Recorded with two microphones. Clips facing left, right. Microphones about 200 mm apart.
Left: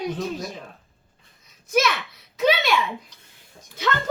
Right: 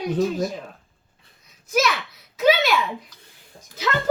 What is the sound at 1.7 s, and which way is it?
A child's voice, centre (ahead or behind).